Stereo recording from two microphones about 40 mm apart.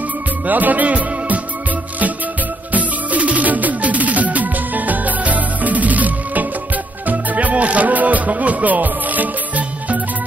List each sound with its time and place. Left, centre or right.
0.5 s music: right
2.7 s music: right